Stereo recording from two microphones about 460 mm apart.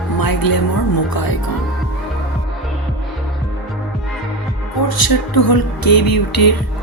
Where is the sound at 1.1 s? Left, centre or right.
Left.